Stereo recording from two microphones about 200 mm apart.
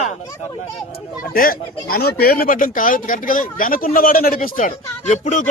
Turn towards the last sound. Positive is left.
turn(degrees=40)  # may be behind; listen again after turning